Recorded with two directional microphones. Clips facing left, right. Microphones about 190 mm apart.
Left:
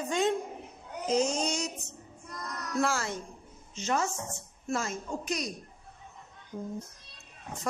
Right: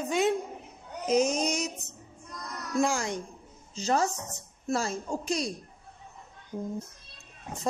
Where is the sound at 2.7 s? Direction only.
15° right (ahead or behind).